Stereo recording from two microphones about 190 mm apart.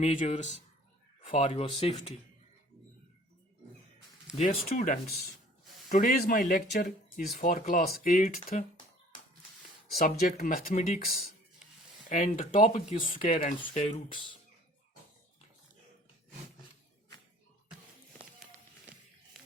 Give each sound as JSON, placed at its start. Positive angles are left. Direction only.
{"t": 0.0, "sound": "speech", "side_deg": 35}
{"t": 4.4, "sound": "speech", "side_deg": 35}
{"t": 5.9, "sound": "speech", "side_deg": 45}
{"t": 10.0, "sound": "speech", "side_deg": 50}